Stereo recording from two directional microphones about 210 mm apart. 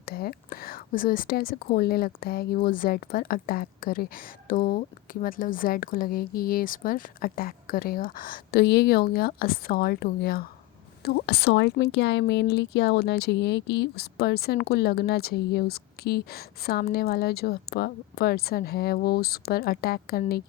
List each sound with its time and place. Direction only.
0.0 s a woman's voice: 45° left (ahead or behind)